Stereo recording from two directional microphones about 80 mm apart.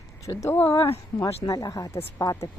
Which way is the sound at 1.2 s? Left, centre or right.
Left.